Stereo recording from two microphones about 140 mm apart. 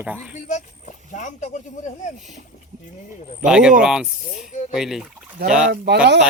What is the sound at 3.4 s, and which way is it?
Speech, 5° right (ahead or behind).